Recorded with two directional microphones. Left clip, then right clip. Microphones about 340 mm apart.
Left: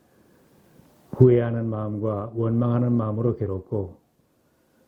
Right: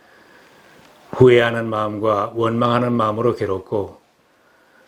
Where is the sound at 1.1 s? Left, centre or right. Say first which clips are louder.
Right 7 dB; centre.